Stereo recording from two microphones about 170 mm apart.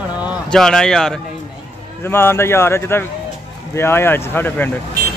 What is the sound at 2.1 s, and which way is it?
Speech, 15° left (ahead or behind).